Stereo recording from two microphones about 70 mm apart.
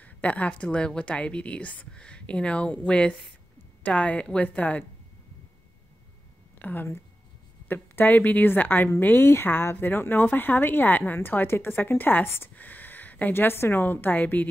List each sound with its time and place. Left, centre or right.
0.0 s a woman's voice: left
6.6 s a woman's voice: left